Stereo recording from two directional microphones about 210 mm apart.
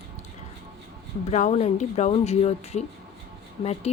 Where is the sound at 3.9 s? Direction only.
30° left (ahead or behind).